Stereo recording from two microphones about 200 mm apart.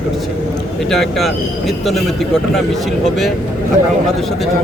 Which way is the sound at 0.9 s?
Centre (ahead or behind).